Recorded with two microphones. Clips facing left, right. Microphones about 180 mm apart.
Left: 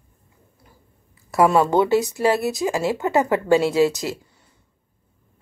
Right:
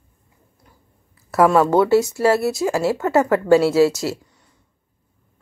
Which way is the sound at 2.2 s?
20° left (ahead or behind).